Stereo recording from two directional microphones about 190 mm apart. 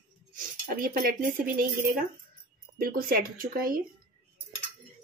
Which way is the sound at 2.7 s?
50° right (ahead or behind).